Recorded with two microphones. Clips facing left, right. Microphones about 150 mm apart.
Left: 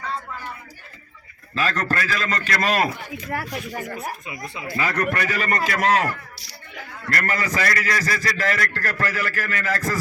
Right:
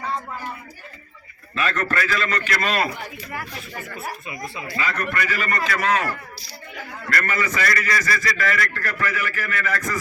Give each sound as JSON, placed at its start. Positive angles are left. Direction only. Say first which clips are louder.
{"t": 1.5, "sound": "a man's voice", "louder": "even", "side_deg": 35}
{"t": 3.8, "sound": "speech", "louder": "left 3 dB", "side_deg": 15}
{"t": 4.7, "sound": "a man's voice", "louder": "left 3 dB", "side_deg": 40}
{"t": 7.1, "sound": "a man's voice", "louder": "even", "side_deg": 35}